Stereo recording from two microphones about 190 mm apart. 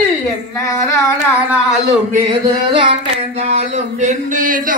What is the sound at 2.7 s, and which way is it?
Child singing, 25° right (ahead or behind).